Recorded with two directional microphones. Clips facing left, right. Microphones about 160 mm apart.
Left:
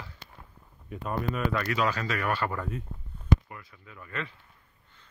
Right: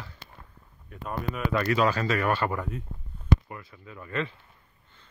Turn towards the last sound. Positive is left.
turn(degrees=-30)  # may be behind; listen again after turning